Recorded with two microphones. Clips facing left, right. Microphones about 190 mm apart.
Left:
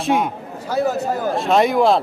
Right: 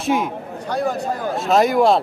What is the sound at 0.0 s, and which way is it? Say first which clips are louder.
Speech: left 1 dB; centre (ahead or behind).